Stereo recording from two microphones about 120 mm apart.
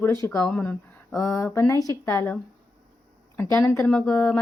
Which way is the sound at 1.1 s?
25° left (ahead or behind).